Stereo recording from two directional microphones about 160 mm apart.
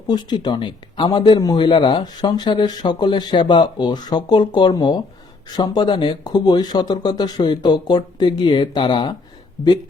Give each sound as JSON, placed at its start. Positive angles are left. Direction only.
{"t": 0.1, "sound": "speech", "side_deg": 25}